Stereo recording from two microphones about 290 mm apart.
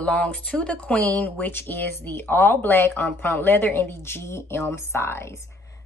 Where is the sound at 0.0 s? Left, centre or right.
Centre.